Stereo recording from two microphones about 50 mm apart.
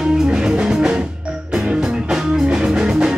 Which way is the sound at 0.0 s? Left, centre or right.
Centre.